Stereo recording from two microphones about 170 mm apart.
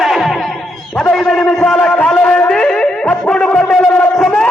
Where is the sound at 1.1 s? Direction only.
Centre (ahead or behind).